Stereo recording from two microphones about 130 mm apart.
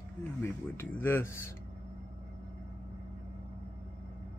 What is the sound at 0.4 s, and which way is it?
Speech, 20° left (ahead or behind).